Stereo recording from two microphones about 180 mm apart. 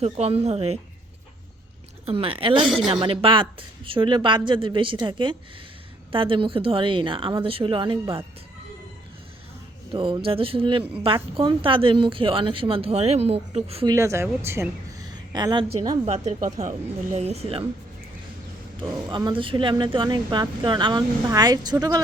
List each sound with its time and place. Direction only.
0.0 s a woman's voice: 35° right (ahead or behind)
2.0 s a woman's voice: 30° right (ahead or behind)
9.9 s a woman's voice: 30° right (ahead or behind)
13.8 s a woman's voice: 15° right (ahead or behind)
16.0 s a woman's voice: 40° right (ahead or behind)
18.8 s a woman's voice: 25° right (ahead or behind)